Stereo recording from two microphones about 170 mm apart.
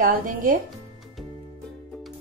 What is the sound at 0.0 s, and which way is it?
Speech, 55° right (ahead or behind).